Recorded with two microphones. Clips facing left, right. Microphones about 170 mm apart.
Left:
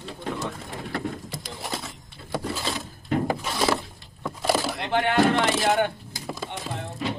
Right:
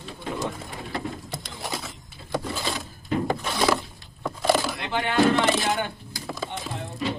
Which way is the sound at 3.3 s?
Centre (ahead or behind).